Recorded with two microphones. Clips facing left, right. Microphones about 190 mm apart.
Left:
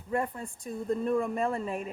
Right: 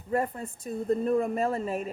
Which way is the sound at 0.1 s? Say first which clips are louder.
Right 3 dB; 40° right (ahead or behind).